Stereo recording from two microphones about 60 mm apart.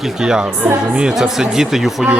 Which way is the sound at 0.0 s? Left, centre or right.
Centre.